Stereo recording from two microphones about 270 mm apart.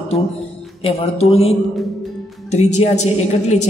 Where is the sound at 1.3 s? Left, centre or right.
Left.